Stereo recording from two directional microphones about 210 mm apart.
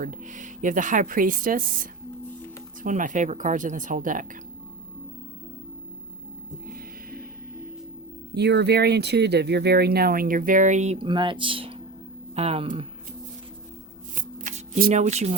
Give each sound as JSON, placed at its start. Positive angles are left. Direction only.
{"t": 0.0, "sound": "speech", "side_deg": -35}
{"t": 6.7, "sound": "music", "side_deg": -45}
{"t": 8.4, "sound": "speech", "side_deg": -55}
{"t": 14.2, "sound": "shuffling cards", "side_deg": -35}